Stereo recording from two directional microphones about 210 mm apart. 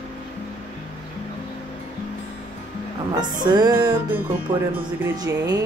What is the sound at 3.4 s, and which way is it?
A woman's voice, 20° right (ahead or behind).